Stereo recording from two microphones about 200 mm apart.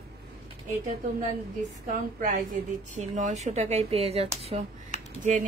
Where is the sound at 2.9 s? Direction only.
40° right (ahead or behind).